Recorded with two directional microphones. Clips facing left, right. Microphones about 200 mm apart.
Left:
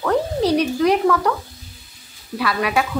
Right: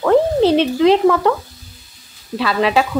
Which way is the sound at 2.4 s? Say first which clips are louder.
Right 4 dB; 25° right (ahead or behind).